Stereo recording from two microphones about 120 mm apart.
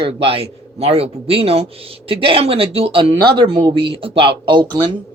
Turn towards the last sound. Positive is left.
turn(degrees=-40)  # may be behind; listen again after turning